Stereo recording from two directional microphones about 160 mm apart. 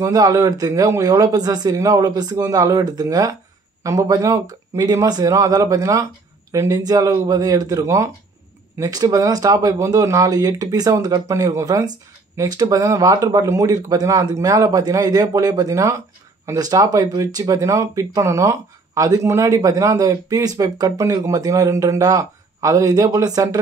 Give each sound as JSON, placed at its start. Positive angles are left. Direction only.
{"t": 0.0, "sound": "speech", "side_deg": -20}